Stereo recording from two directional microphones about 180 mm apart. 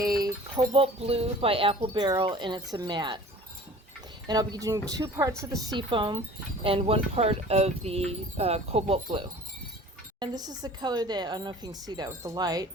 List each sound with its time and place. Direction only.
0.2 s speech: 30° right (ahead or behind)
4.3 s speech: 20° right (ahead or behind)
10.2 s speech: 20° right (ahead or behind)